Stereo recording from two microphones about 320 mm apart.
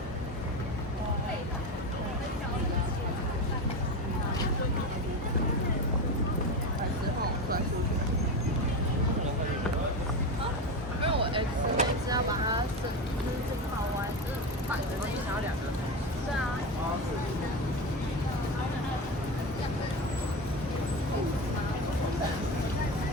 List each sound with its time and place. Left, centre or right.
11.0 s vehicle: centre